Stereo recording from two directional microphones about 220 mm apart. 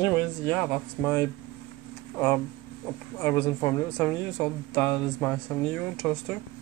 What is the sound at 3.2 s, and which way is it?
A man's voice, 10° left (ahead or behind).